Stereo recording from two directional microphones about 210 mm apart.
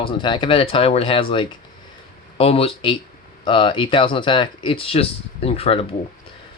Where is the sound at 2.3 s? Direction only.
25° left (ahead or behind).